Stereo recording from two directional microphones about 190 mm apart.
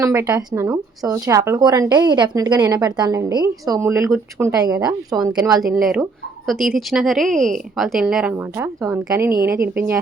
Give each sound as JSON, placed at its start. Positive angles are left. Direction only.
{"t": 0.0, "sound": "a woman's voice", "side_deg": -15}
{"t": 5.8, "sound": "speech", "side_deg": 0}